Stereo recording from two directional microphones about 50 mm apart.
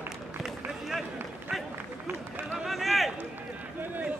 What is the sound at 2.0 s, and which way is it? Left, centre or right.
Run, right.